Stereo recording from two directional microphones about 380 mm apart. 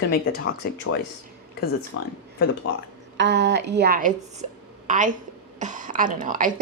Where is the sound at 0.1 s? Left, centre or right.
Left.